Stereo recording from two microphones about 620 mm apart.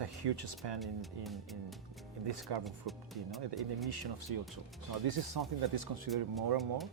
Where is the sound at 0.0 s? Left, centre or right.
Right.